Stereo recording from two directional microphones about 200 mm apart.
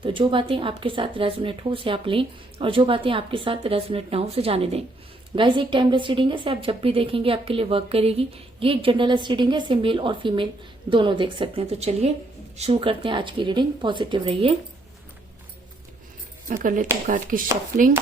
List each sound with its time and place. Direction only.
0.0 s a woman's voice: 25° right (ahead or behind)
16.5 s speech: 45° right (ahead or behind)